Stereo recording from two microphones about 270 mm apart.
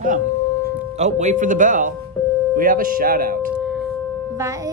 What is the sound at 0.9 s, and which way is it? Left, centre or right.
Speech, right.